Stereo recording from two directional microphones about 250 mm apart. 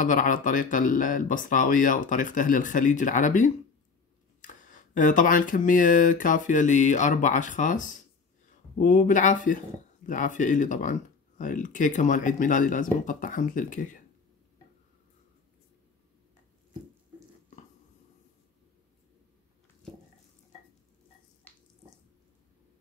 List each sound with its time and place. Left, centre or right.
0.0 s speech: left